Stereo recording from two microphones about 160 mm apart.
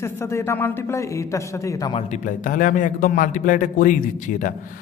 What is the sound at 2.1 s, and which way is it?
A man's voice, 55° left (ahead or behind).